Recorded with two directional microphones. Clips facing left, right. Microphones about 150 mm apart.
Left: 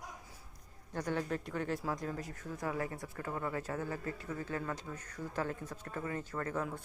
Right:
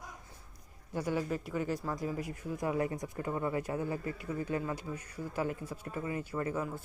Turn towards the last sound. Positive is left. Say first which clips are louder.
# right 3 dB
turn(degrees=-5)  # may be behind; listen again after turning